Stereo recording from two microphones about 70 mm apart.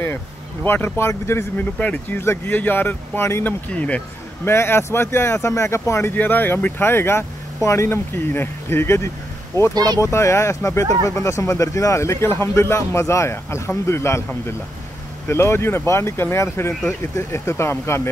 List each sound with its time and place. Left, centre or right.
0.7 s speech: left
1.6 s speech: left
2.1 s speech: left
3.4 s speech: centre
4.5 s speech: left
6.1 s speech: left
15.2 s speech: left